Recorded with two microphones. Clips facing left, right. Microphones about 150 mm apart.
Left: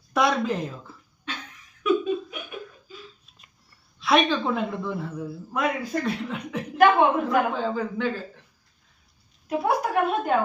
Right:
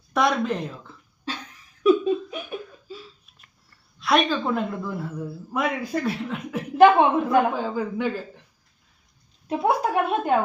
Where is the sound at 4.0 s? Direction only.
Centre (ahead or behind).